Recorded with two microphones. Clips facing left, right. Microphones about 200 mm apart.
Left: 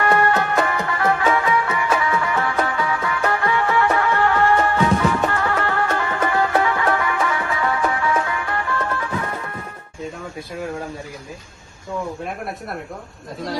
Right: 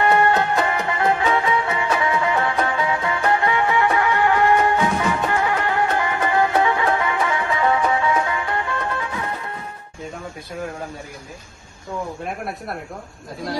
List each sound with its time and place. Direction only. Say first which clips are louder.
0.0 s music: right 1 dB; 20° right (ahead or behind)